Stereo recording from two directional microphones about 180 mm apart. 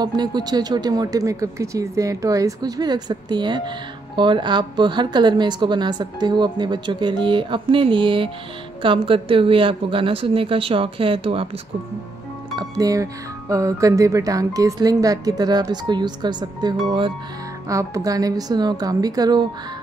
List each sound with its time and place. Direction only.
0.0 s speech: 25° right (ahead or behind)
12.5 s speech: 20° right (ahead or behind)